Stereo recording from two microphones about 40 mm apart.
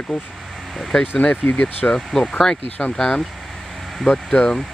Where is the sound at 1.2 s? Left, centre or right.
Left.